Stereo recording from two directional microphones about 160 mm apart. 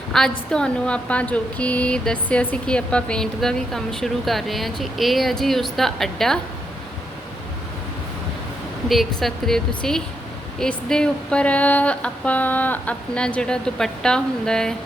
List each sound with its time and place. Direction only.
0.1 s a woman's voice: 5° left (ahead or behind)
8.9 s a woman's voice: centre (ahead or behind)
10.6 s a sound: 5° left (ahead or behind)